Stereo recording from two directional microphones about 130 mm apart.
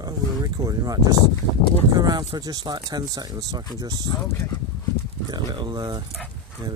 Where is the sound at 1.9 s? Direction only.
30° right (ahead or behind).